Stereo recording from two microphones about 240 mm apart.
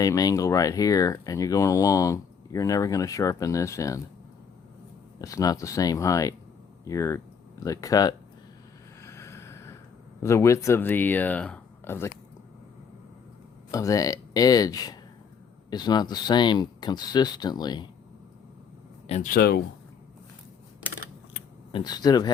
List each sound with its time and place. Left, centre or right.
0.0 s speech: centre
5.2 s speech: centre
9.0 s a sound: centre
10.2 s speech: centre
13.7 s speech: centre
19.0 s speech: left
21.7 s speech: centre